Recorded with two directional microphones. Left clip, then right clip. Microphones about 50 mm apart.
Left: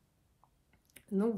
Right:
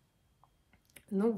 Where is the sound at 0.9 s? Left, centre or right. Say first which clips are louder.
Right 1 dB; right.